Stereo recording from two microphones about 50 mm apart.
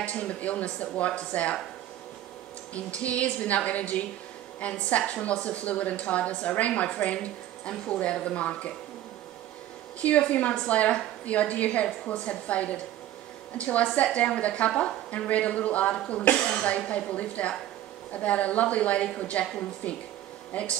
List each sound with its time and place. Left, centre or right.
0.0 s a woman's voice: left
2.7 s a woman's voice: left
10.3 s a woman's voice: left
15.0 s a woman's voice: left
20.5 s a woman's voice: left